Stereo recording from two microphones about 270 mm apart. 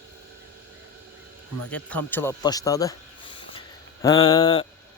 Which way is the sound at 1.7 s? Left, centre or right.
Centre.